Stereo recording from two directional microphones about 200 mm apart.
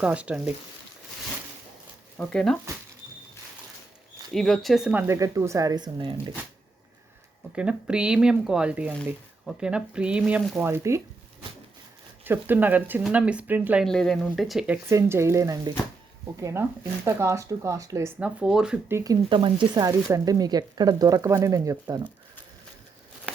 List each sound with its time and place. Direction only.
0.0 s speech: 5° right (ahead or behind)
2.1 s speech: 5° left (ahead or behind)
4.4 s speech: centre (ahead or behind); by 6.1 s 20° right (ahead or behind)
7.5 s speech: 5° right (ahead or behind)
12.2 s speech: 10° right (ahead or behind)
14.8 s speech: 15° right (ahead or behind)